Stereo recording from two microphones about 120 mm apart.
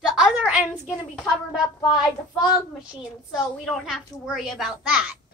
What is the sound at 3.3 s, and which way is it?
A woman's voice, centre (ahead or behind).